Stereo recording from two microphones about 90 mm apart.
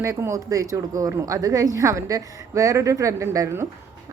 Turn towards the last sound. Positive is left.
turn(degrees=-35)  # may be behind; listen again after turning